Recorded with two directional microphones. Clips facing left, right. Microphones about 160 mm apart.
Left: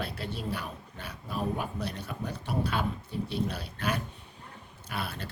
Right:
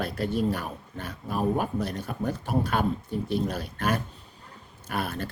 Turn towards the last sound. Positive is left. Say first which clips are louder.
# right 6 dB
turn(degrees=-45)  # may be behind; listen again after turning